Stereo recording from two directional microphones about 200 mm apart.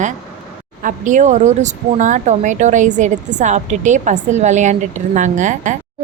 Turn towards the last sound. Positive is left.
turn(degrees=-35)  # may be behind; listen again after turning